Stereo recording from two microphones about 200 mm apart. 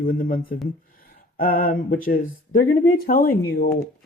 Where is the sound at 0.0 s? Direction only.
45° left (ahead or behind).